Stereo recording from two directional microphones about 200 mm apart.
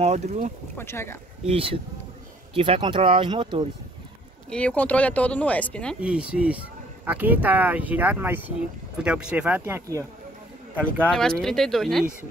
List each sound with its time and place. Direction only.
0.0 s speech: 35° right (ahead or behind)
0.7 s speech: 10° left (ahead or behind)
1.5 s speech: 30° right (ahead or behind)
4.5 s speech: 5° left (ahead or behind)
5.9 s speech: 5° right (ahead or behind)
11.1 s speech: centre (ahead or behind)